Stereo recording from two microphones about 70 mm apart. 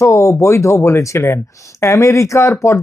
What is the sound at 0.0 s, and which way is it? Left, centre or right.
Speech, left.